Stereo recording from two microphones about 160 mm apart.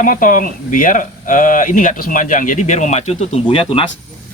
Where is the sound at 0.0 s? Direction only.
60° left (ahead or behind).